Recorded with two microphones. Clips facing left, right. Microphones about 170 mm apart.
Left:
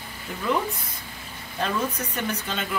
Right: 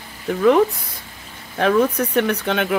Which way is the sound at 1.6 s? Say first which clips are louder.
Right 10 dB; 65° right (ahead or behind).